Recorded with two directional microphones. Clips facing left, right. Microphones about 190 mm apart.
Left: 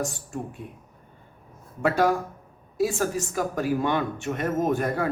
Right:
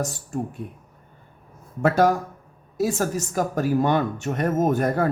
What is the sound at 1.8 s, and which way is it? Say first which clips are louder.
A woman's voice: right 3 dB; 45° right (ahead or behind).